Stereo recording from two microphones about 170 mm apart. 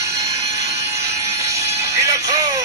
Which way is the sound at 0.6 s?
20° right (ahead or behind).